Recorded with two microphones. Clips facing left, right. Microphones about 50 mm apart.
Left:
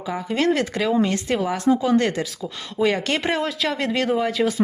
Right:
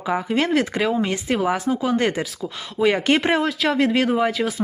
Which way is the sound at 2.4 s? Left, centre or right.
Centre.